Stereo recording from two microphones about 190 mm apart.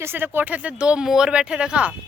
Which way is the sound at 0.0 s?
10° right (ahead or behind).